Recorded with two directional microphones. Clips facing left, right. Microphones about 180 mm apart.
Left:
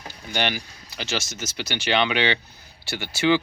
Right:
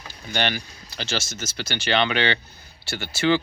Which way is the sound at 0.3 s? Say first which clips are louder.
Even; 10° left (ahead or behind).